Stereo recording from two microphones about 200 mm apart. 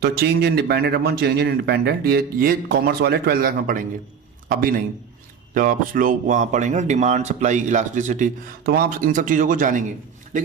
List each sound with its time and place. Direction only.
0.0 s a man's voice: 55° right (ahead or behind)